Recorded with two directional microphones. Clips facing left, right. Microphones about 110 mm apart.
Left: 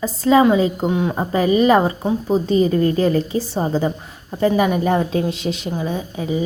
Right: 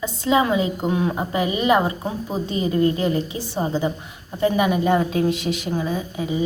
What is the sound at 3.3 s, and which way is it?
A woman's voice, 35° left (ahead or behind).